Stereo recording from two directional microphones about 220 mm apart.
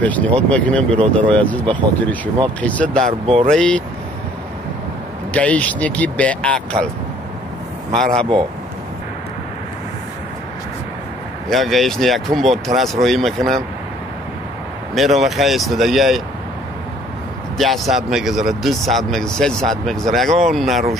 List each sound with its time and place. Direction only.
0.0 s speech: 5° left (ahead or behind)
3.0 s speech: 30° right (ahead or behind)
3.4 s speech: 5° left (ahead or behind)
5.3 s speech: 5° left (ahead or behind)
8.0 s speech: centre (ahead or behind)
11.4 s speech: centre (ahead or behind)
15.0 s speech: centre (ahead or behind)
17.6 s speech: centre (ahead or behind)